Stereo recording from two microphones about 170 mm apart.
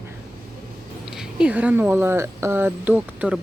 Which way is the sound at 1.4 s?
5° right (ahead or behind).